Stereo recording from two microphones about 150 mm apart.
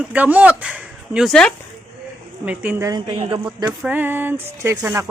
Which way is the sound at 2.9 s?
30° right (ahead or behind).